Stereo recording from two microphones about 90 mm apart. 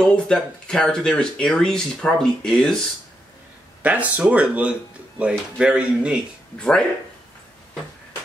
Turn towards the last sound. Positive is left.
turn(degrees=10)  # may be behind; listen again after turning